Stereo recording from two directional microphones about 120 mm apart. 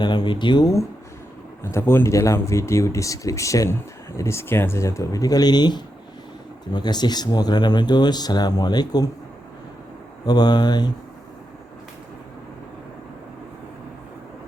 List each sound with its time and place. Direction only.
0.0 s speech: 35° left (ahead or behind)
1.6 s speech: 20° left (ahead or behind); by 9.0 s 35° left (ahead or behind)
10.2 s speech: 35° left (ahead or behind)